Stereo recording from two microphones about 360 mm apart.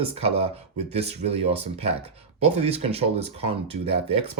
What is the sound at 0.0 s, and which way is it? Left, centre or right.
Speech, centre.